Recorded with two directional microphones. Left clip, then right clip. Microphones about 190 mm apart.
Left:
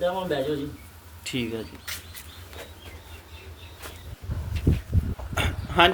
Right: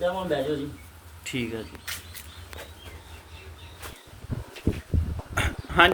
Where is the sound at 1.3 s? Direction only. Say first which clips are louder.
Left 1 dB; 15° left (ahead or behind).